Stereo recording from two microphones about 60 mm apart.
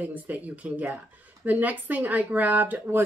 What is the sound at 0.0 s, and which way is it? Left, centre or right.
Speech, right.